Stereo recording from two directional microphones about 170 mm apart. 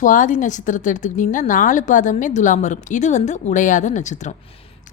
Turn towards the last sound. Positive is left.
turn(degrees=45)  # may be behind; listen again after turning